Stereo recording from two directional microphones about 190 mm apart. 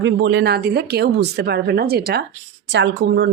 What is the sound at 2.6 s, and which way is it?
Speech, 70° right (ahead or behind).